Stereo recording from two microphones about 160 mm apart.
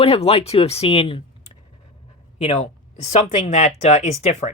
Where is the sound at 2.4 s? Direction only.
40° left (ahead or behind).